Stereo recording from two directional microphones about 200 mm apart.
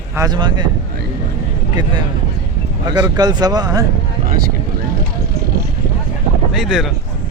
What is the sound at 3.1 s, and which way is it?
Speech, 20° right (ahead or behind).